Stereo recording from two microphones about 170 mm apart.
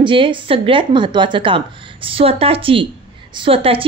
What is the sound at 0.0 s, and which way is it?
A woman's voice, 30° right (ahead or behind).